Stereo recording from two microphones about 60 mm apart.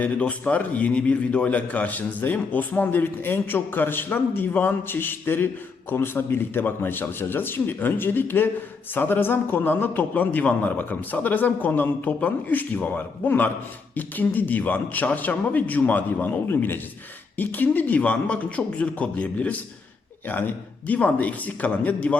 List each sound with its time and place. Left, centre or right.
0.0 s a man's voice: left